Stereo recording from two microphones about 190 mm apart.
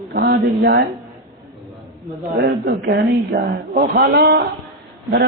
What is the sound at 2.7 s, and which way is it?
A man's voice, 55° right (ahead or behind).